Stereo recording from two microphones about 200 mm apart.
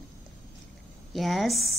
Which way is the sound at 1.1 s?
Centre (ahead or behind).